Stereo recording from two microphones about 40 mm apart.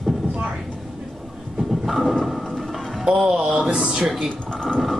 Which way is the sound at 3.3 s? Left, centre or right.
Right.